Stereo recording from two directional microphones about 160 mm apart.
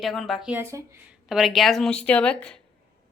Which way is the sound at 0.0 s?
Centre (ahead or behind).